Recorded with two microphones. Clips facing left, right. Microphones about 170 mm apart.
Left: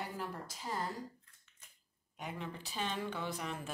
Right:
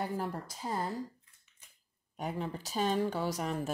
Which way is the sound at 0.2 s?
40° right (ahead or behind).